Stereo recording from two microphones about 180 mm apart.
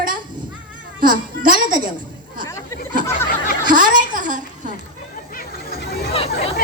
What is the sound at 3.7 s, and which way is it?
Speech, 45° right (ahead or behind).